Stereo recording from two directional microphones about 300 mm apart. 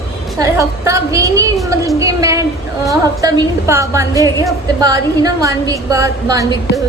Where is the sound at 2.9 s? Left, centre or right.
Centre.